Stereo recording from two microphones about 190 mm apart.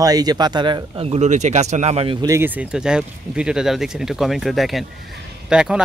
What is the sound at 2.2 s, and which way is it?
Speech, 10° right (ahead or behind).